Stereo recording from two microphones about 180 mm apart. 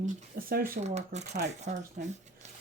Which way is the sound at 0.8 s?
40° right (ahead or behind).